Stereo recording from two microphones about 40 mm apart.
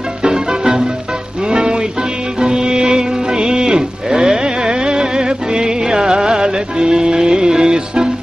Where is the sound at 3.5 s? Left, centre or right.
Centre.